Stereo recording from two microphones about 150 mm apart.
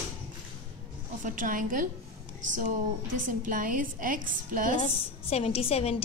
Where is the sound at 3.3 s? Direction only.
65° right (ahead or behind).